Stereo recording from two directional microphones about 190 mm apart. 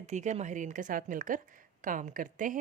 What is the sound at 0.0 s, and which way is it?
Speech, 40° right (ahead or behind).